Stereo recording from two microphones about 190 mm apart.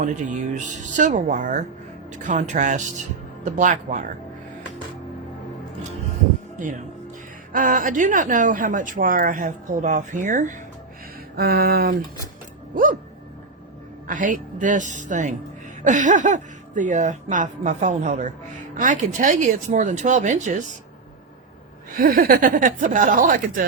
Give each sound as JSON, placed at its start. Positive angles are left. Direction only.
{"t": 0.0, "sound": "speech", "side_deg": -40}
{"t": 6.6, "sound": "speech", "side_deg": -45}
{"t": 11.3, "sound": "speech", "side_deg": -55}
{"t": 14.1, "sound": "speech", "side_deg": -45}
{"t": 21.9, "sound": "speech", "side_deg": -50}